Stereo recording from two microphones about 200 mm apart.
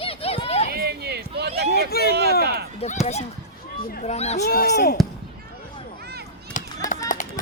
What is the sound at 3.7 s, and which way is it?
Speech, 50° left (ahead or behind).